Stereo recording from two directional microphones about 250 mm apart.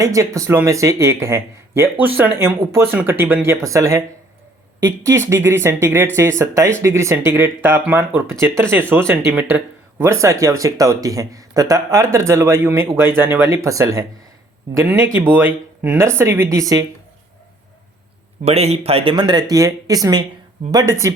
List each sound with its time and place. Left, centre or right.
0.0 s speech: centre
18.4 s speech: right